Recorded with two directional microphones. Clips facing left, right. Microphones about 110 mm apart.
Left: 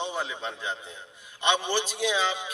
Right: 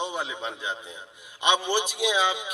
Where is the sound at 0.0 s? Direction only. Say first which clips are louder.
Right 1 dB; 15° right (ahead or behind).